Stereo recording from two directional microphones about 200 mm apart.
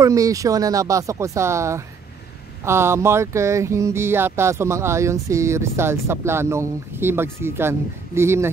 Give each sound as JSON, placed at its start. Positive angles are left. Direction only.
{"t": 0.0, "sound": "speech", "side_deg": -15}